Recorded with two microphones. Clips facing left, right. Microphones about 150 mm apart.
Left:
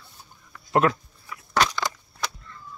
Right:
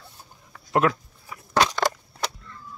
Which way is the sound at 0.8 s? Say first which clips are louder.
Even; 5° right (ahead or behind).